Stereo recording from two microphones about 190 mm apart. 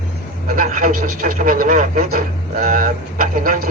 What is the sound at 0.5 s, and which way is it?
Speech, 45° right (ahead or behind).